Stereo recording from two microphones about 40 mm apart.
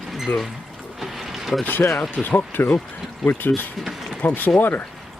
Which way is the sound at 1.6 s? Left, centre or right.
Left.